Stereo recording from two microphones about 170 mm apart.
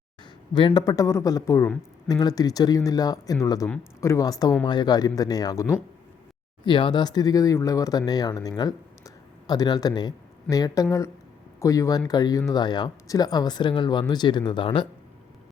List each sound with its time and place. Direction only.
0.5 s speech: 25° left (ahead or behind)